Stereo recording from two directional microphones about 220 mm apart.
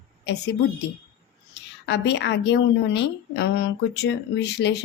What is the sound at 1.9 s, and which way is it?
A woman's voice, 50° left (ahead or behind).